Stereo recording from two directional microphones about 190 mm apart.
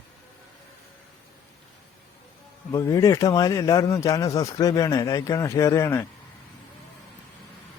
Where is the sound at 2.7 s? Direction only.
15° left (ahead or behind).